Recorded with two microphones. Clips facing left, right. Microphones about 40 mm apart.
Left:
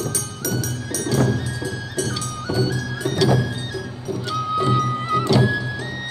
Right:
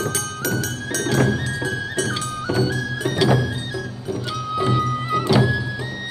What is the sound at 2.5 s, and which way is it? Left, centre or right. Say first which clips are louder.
Music: even; right.